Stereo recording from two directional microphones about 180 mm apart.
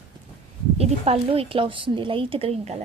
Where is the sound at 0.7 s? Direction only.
35° right (ahead or behind).